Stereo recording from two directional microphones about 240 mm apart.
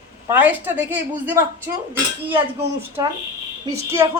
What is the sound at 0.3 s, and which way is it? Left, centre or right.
A woman's voice, centre.